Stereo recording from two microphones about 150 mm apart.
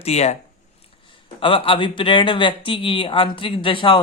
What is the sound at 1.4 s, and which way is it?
Speech, 35° left (ahead or behind).